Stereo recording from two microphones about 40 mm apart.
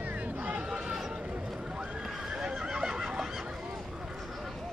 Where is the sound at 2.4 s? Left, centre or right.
Centre.